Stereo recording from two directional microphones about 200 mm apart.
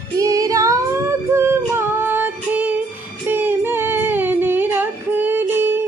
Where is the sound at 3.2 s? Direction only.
10° right (ahead or behind).